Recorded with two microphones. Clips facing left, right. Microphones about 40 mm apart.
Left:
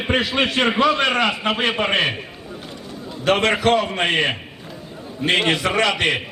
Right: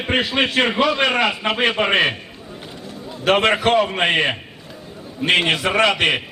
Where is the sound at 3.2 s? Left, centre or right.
Centre.